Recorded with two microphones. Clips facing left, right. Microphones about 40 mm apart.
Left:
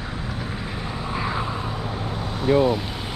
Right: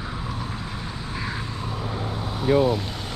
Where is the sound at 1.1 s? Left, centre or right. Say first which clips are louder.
Left 5 dB; centre.